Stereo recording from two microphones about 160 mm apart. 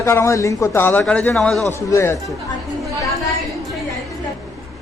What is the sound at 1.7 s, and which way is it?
Speech, 15° left (ahead or behind).